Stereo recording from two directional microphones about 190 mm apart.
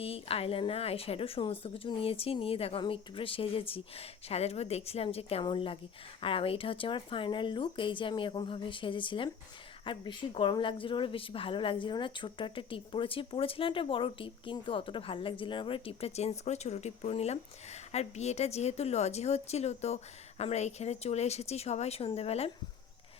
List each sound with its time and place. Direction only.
0.0 s a woman's voice: 30° left (ahead or behind)